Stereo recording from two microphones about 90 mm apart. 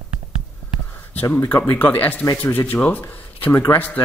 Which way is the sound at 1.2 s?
20° left (ahead or behind).